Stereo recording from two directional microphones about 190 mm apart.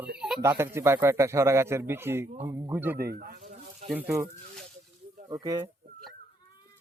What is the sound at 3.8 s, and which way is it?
Speech, 10° right (ahead or behind).